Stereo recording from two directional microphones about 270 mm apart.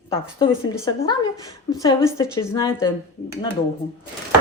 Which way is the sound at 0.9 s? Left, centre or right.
Centre.